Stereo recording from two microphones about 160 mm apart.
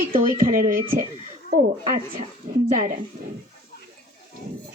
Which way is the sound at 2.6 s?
55° right (ahead or behind).